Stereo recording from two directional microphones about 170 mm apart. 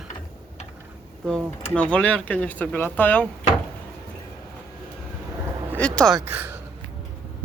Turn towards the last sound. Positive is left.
turn(degrees=-10)  # may be behind; listen again after turning